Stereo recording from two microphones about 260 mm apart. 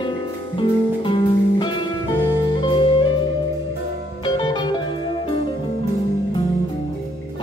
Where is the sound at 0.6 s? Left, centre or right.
Centre.